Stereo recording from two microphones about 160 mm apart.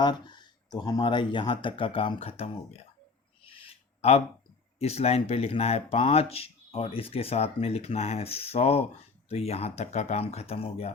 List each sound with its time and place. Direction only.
0.0 s speech: 25° left (ahead or behind)
3.4 s a sound: 35° left (ahead or behind)
4.8 s speech: 40° left (ahead or behind)